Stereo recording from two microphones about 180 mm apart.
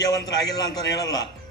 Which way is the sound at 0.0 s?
20° left (ahead or behind).